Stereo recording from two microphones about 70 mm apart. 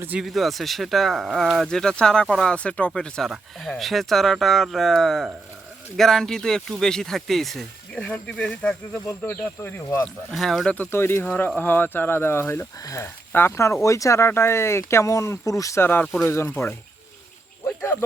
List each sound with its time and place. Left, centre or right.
0.2 s speech: centre
7.9 s speech: centre
9.6 s speech: left
10.3 s speech: centre
10.9 s speech: left
12.8 s speech: left
13.3 s speech: left
14.3 s speech: left
15.8 s speech: left
17.7 s a sound: left